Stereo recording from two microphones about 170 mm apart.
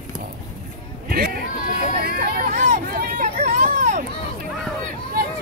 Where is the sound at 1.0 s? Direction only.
60° right (ahead or behind).